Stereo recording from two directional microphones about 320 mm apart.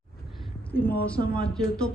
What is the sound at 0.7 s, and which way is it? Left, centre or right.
Speech, centre.